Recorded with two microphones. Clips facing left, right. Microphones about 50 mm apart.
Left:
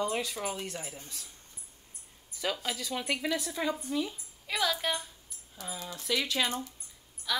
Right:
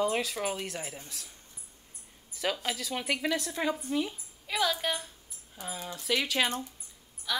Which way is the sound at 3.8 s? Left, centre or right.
Right.